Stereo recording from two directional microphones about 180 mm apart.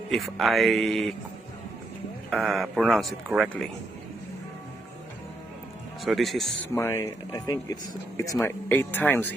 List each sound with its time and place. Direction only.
0.1 s speech: centre (ahead or behind)
2.3 s speech: centre (ahead or behind)
6.1 s speech: centre (ahead or behind)
6.7 s speech: 15° left (ahead or behind)